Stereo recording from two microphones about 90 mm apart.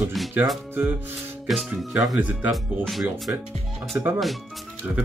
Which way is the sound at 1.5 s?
Centre (ahead or behind).